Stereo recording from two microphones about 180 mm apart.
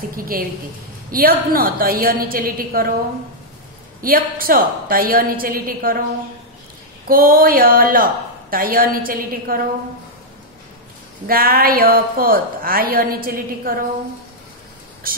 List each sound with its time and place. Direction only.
0.1 s a woman's voice: 55° right (ahead or behind)
4.0 s a woman's voice: 55° right (ahead or behind)
7.1 s a woman's voice: 55° right (ahead or behind)
11.2 s a woman's voice: 55° right (ahead or behind)
15.0 s a woman's voice: 55° right (ahead or behind)